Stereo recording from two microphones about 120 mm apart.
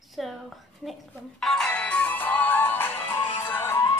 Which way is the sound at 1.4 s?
5° left (ahead or behind).